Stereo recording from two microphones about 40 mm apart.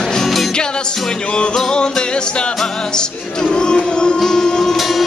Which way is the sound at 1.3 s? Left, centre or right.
Left.